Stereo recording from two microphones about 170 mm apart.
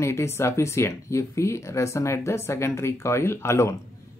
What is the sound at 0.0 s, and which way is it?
Speech, 15° left (ahead or behind).